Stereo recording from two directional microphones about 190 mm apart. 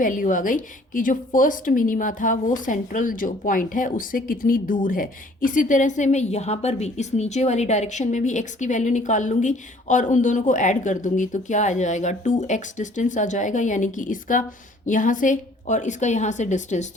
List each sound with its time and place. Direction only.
0.0 s a woman's voice: 45° left (ahead or behind)